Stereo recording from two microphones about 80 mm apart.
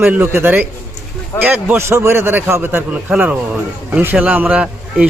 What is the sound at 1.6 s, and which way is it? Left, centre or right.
A man's voice, right.